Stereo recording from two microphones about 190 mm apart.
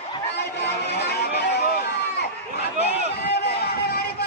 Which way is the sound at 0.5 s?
60° left (ahead or behind).